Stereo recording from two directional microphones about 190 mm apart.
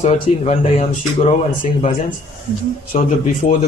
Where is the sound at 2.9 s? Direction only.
35° left (ahead or behind).